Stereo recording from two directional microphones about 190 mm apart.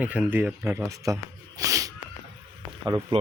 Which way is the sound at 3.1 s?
30° right (ahead or behind).